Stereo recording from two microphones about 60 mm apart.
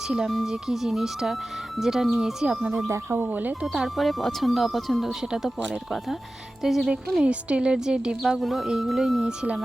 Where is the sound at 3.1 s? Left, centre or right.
Right.